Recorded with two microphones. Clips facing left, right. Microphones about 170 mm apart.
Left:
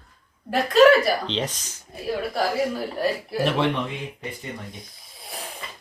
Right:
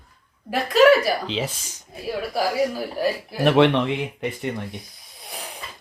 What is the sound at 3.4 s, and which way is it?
Speech, 65° right (ahead or behind).